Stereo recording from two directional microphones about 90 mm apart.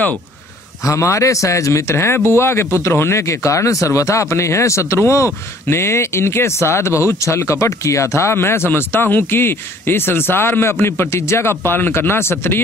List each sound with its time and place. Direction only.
0.8 s speech: 35° left (ahead or behind)